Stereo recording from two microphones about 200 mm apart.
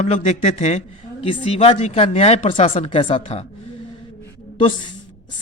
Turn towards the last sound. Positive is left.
turn(degrees=25)  # may be behind; listen again after turning